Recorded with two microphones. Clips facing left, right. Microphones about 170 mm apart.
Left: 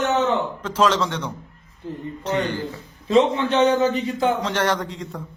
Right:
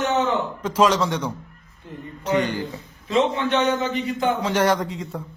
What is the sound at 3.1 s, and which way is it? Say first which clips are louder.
A man's voice: left 3 dB; 30° left (ahead or behind).